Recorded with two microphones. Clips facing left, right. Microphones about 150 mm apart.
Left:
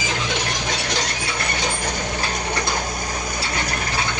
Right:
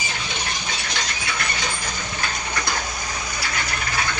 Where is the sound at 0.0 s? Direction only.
90° left.